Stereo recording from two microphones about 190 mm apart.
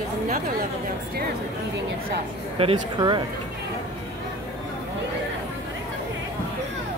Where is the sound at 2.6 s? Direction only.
25° right (ahead or behind).